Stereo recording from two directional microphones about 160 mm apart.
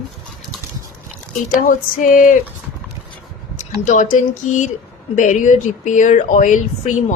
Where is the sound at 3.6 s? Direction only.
50° left (ahead or behind).